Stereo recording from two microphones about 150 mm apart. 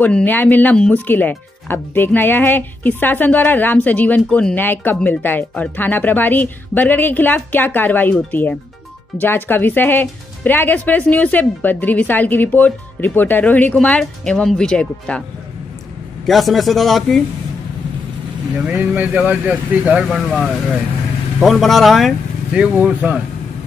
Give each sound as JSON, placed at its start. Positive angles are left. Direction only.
{"t": 0.0, "sound": "speech", "side_deg": 10}
{"t": 16.3, "sound": "speech", "side_deg": 0}
{"t": 18.8, "sound": "speech", "side_deg": -10}